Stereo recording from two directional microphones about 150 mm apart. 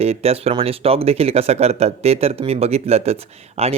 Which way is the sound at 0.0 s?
45° right (ahead or behind).